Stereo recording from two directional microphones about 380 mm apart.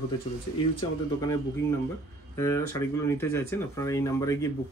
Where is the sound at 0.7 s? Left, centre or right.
Centre.